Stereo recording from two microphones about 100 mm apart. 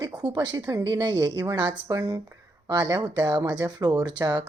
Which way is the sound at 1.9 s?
35° right (ahead or behind).